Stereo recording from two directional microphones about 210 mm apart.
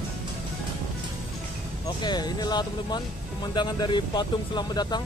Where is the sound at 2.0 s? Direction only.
20° left (ahead or behind).